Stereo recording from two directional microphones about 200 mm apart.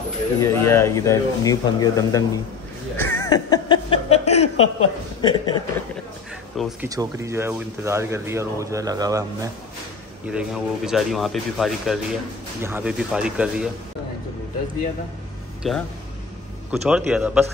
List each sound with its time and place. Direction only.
0.4 s a man's voice: 15° left (ahead or behind)
6.5 s speech: centre (ahead or behind)
6.9 s speech: 15° right (ahead or behind)
10.2 s speech: 5° right (ahead or behind)
15.6 s speech: centre (ahead or behind)